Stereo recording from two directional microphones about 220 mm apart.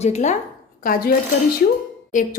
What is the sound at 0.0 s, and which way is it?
Speech, 30° left (ahead or behind).